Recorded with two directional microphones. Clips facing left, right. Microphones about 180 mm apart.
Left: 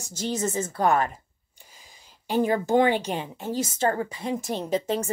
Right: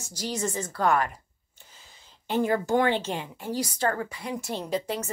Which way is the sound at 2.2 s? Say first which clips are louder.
Left 2 dB; 15° left (ahead or behind).